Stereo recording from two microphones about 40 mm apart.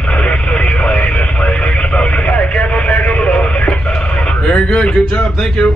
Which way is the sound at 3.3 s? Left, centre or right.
Left.